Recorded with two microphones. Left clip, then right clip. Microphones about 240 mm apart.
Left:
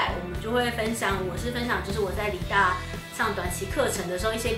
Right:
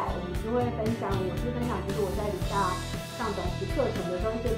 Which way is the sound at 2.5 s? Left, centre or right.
Centre.